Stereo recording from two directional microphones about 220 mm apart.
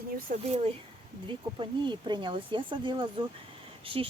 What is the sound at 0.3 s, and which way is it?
Speech, 30° right (ahead or behind).